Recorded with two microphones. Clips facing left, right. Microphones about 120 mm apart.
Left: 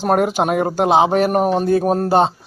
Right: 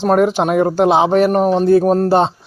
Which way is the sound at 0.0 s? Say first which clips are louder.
Right 3 dB; 5° left (ahead or behind).